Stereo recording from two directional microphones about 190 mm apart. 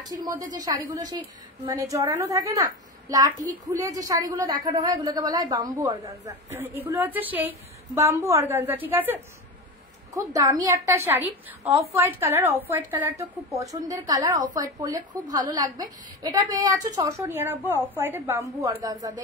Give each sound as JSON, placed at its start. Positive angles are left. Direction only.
{"t": 0.0, "sound": "a woman's voice", "side_deg": -20}